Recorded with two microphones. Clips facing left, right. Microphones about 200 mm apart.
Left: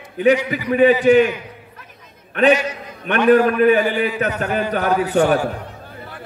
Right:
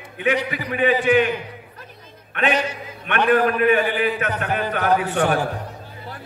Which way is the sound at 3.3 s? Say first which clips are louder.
Left 5 dB; 35° left (ahead or behind).